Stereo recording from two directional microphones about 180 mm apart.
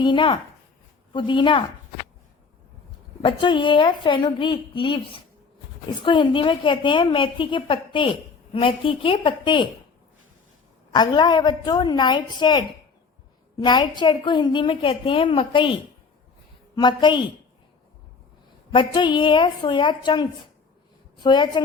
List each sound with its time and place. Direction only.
0.0 s a woman's voice: 25° left (ahead or behind)
3.2 s a woman's voice: 25° left (ahead or behind)
10.9 s a woman's voice: 25° left (ahead or behind)
16.7 s a woman's voice: 25° left (ahead or behind)
18.7 s a woman's voice: 25° left (ahead or behind)
21.2 s a woman's voice: 25° left (ahead or behind)